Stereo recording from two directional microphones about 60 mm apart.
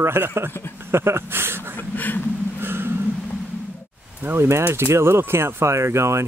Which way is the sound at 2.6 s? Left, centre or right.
Right.